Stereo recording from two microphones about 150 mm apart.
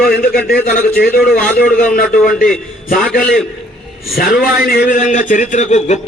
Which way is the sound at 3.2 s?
5° left (ahead or behind).